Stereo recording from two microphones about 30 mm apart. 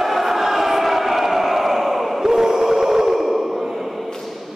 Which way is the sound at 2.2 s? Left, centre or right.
Centre.